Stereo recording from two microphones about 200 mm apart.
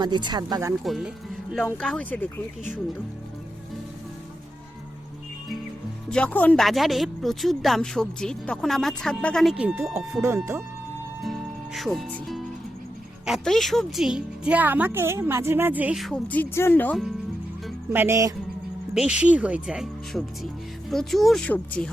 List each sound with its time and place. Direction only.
0.0 s speech: 20° right (ahead or behind)
0.9 s speech: centre (ahead or behind)
6.1 s speech: 5° left (ahead or behind); by 10.6 s 15° right (ahead or behind)
11.2 s music: centre (ahead or behind)
13.2 s speech: centre (ahead or behind)
17.9 s speech: 10° right (ahead or behind); by 21.8 s 5° left (ahead or behind)